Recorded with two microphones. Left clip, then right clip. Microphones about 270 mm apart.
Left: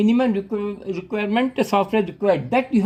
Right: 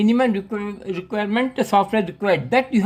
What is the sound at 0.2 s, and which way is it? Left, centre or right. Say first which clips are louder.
Speech: right 1 dB; centre.